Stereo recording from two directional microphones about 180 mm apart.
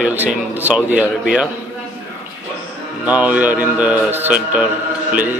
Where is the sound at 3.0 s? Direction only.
10° right (ahead or behind).